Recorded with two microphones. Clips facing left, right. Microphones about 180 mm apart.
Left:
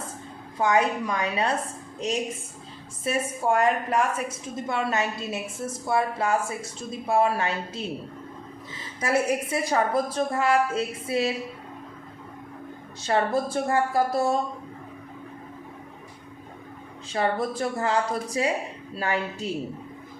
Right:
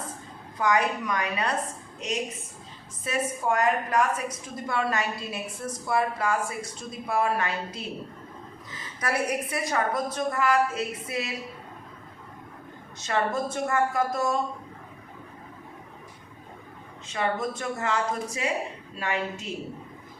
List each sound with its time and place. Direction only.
0.6 s a woman's voice: 25° left (ahead or behind)
3.0 s a woman's voice: 30° left (ahead or behind)
9.0 s a woman's voice: 25° left (ahead or behind)
13.0 s a woman's voice: 30° left (ahead or behind)
17.1 s a woman's voice: 35° left (ahead or behind)